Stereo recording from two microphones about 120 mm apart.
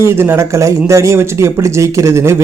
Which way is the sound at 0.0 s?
20° right (ahead or behind).